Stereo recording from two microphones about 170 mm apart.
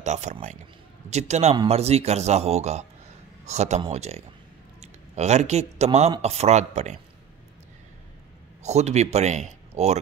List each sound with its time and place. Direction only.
0.0 s a man's voice: 45° right (ahead or behind)
8.6 s speech: 40° right (ahead or behind)